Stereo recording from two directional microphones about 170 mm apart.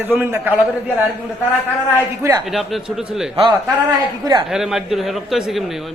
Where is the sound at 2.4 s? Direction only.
Centre (ahead or behind).